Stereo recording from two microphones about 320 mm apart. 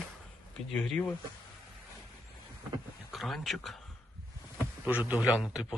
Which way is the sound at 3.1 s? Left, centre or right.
Centre.